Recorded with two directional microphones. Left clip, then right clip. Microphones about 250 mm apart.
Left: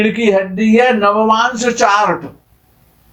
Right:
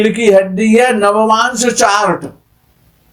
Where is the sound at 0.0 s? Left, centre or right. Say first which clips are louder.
Right 4 dB; right.